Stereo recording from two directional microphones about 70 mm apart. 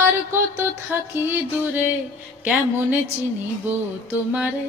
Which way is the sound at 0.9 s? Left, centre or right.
Right.